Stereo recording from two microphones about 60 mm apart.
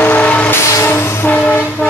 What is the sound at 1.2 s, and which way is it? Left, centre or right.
Train, left.